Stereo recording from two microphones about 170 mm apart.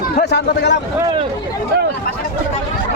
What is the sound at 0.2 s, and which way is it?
Speech, 85° left.